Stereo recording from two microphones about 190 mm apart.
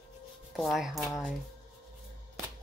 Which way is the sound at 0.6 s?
Centre (ahead or behind).